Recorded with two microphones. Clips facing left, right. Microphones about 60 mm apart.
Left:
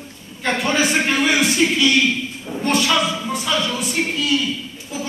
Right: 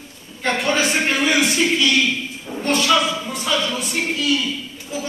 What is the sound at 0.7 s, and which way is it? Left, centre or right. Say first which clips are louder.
A man's voice: left 1 dB; centre.